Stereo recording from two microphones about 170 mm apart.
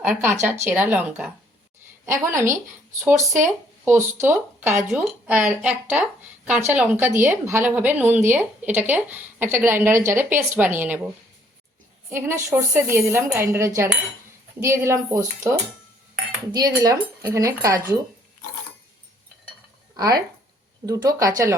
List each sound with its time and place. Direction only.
0.0 s speech: 10° right (ahead or behind)
12.1 s speech: 15° right (ahead or behind)
20.8 s speech: 20° right (ahead or behind)